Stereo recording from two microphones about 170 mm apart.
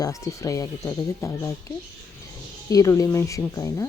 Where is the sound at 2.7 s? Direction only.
20° left (ahead or behind).